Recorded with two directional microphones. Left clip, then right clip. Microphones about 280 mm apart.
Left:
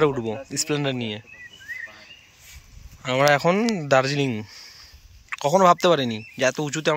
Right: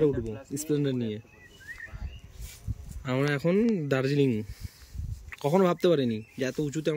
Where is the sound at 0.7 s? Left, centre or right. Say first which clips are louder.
Left 2 dB; centre.